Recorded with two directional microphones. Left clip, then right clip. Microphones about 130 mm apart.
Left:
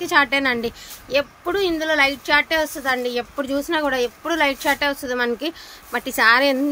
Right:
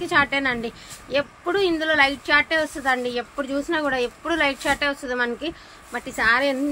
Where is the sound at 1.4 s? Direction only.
25° left (ahead or behind).